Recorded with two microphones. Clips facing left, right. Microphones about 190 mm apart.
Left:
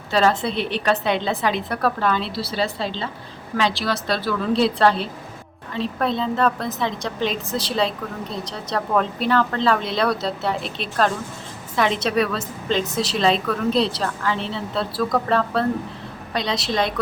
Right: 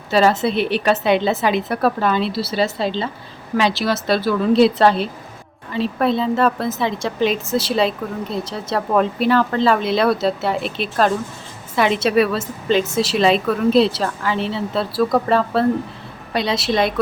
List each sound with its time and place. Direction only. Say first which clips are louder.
0.1 s a woman's voice: right 4 dB; 10° right (ahead or behind)